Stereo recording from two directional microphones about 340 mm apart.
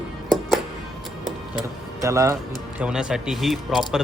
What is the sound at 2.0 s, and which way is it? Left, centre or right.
Speech, centre.